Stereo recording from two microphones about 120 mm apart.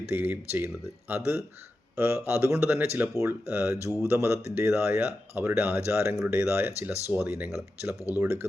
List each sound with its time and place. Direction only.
0.1 s speech: 20° right (ahead or behind)